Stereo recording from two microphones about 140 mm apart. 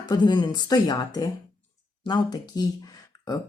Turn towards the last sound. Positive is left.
turn(degrees=25)  # may be behind; listen again after turning